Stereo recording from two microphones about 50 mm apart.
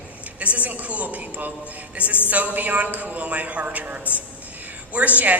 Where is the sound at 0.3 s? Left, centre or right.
Right.